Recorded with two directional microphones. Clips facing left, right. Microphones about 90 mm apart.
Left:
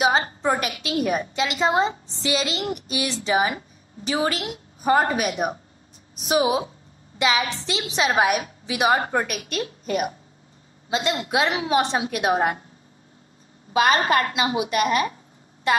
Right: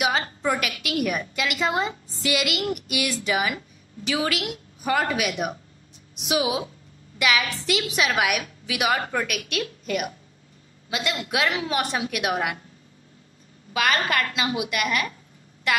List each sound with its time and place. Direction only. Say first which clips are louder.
0.0 s a woman's voice: left 4 dB; 30° left (ahead or behind)
13.7 s a woman's voice: left 5 dB; 30° left (ahead or behind)